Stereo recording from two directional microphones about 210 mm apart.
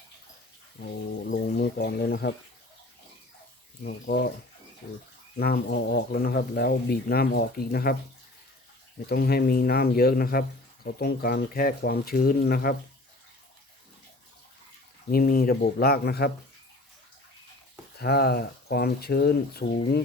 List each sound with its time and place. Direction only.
0.8 s speech: 45° left (ahead or behind)
3.8 s speech: 50° left (ahead or behind)
5.4 s speech: 45° left (ahead or behind)
9.0 s speech: 50° left (ahead or behind)
15.1 s speech: 45° left (ahead or behind)
17.9 s speech: 50° left (ahead or behind)